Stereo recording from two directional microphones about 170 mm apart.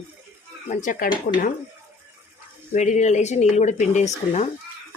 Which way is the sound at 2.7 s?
45° left (ahead or behind).